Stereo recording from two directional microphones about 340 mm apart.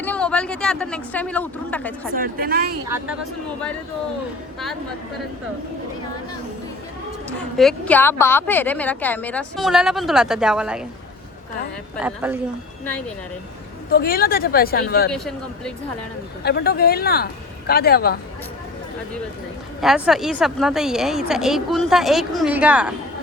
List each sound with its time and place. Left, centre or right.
0.0 s speech: centre
2.1 s speech: right
7.3 s a woman's voice: centre
11.9 s a woman's voice: centre
13.9 s speech: left
15.1 s a woman's voice: centre
16.4 s speech: left
19.8 s a woman's voice: centre